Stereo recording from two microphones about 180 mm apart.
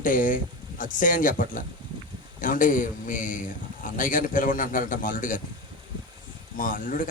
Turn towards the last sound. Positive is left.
turn(degrees=50)  # may be behind; listen again after turning